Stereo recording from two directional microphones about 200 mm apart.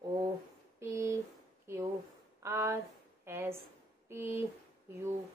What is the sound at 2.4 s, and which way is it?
A woman's voice, 15° right (ahead or behind).